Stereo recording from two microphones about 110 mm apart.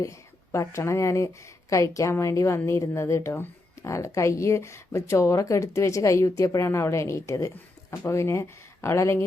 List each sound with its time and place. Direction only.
0.0 s a woman's voice: 25° left (ahead or behind)